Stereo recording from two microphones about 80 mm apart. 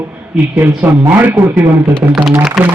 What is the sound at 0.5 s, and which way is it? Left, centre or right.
Speech, right.